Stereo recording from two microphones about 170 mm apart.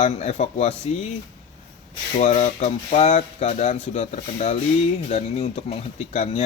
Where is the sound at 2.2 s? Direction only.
40° left (ahead or behind).